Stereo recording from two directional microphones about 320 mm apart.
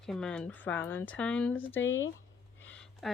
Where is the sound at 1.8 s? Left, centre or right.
Left.